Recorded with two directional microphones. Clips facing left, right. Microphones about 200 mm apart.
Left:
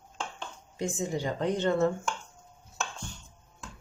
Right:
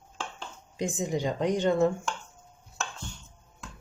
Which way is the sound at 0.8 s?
15° right (ahead or behind).